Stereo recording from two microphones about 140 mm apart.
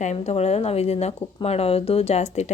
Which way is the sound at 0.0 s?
55° left (ahead or behind).